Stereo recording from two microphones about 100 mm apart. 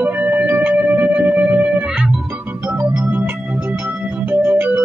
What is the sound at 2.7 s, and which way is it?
Organ, 15° right (ahead or behind).